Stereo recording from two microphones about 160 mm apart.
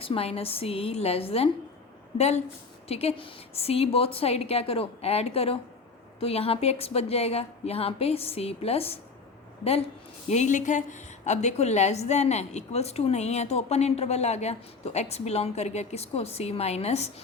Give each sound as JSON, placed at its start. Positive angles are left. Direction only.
{"t": 0.0, "sound": "a woman's voice", "side_deg": 35}
{"t": 10.2, "sound": "a woman's voice", "side_deg": 45}